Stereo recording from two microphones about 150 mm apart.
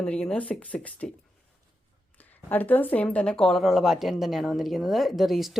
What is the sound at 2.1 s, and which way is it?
Speech, 10° left (ahead or behind).